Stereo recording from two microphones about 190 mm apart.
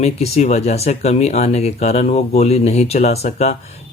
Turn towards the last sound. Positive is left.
turn(degrees=35)  # may be behind; listen again after turning